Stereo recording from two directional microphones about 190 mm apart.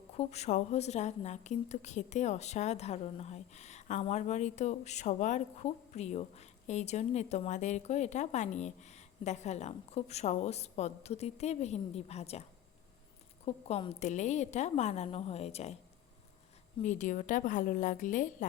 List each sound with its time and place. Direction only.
0.2 s a woman's voice: 35° left (ahead or behind)
16.8 s a woman's voice: 40° left (ahead or behind)